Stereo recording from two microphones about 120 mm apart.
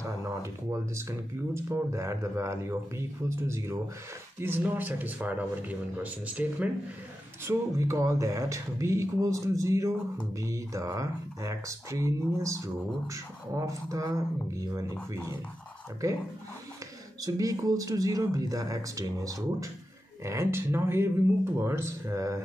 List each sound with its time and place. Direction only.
0.2 s speech: 25° right (ahead or behind)
7.4 s speech: 25° right (ahead or behind)
16.0 s speech: 25° right (ahead or behind)
17.2 s speech: 30° right (ahead or behind)